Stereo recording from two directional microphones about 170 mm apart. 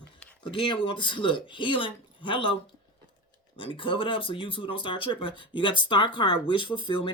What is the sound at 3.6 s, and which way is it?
A woman's voice, 30° left (ahead or behind).